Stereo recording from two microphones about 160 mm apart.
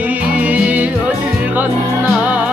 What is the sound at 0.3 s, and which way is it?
Music, 10° right (ahead or behind).